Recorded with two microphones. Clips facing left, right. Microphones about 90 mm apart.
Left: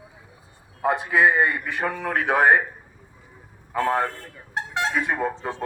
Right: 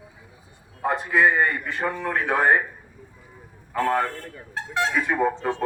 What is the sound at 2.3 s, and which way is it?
Speech, 80° left.